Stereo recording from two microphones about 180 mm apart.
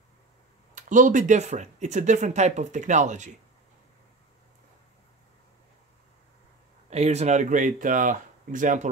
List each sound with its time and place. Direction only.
0.7 s speech: 45° right (ahead or behind)
6.9 s speech: 35° right (ahead or behind)